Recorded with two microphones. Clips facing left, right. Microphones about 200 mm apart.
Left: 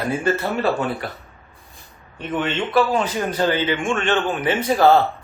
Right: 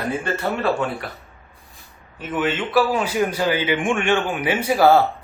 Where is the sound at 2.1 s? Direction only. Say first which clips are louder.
Even; 5° right (ahead or behind).